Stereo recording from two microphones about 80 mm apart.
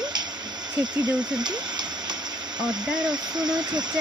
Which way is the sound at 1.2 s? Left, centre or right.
Right.